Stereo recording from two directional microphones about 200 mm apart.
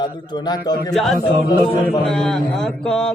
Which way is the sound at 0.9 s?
Centre (ahead or behind).